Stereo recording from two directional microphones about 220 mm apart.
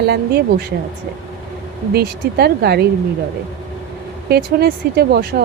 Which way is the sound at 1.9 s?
45° right (ahead or behind).